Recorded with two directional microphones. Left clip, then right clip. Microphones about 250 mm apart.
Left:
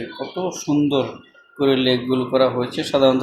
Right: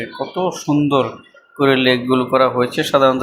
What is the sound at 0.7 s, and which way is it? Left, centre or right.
Speech, right.